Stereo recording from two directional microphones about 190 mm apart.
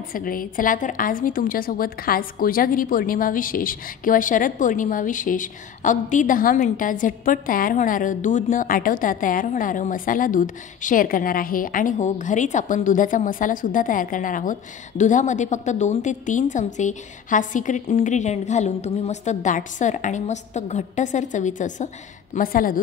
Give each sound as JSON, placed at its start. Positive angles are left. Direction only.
{"t": 0.1, "sound": "a woman's voice", "side_deg": 50}